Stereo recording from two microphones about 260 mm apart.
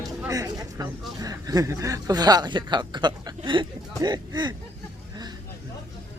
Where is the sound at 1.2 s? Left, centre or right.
Centre.